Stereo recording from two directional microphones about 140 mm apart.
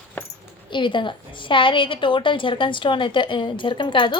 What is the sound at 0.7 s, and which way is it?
A woman's voice, 35° left (ahead or behind).